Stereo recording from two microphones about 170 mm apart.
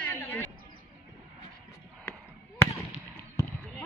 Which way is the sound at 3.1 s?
10° left (ahead or behind).